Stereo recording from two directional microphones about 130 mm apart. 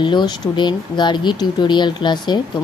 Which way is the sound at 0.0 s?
35° left (ahead or behind).